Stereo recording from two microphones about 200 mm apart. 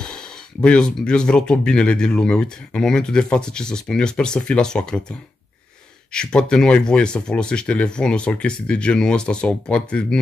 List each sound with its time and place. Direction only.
0.0 s speech: 5° left (ahead or behind)
6.1 s speech: 5° left (ahead or behind)